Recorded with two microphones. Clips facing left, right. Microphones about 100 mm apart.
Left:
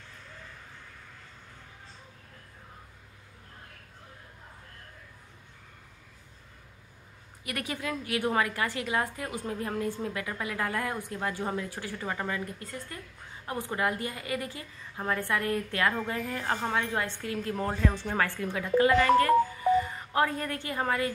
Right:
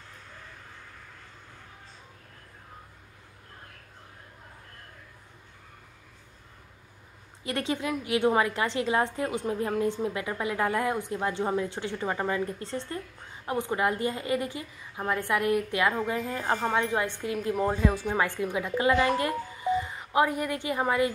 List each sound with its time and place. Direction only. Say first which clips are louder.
7.4 s a woman's voice: right 5 dB; 25° right (ahead or behind)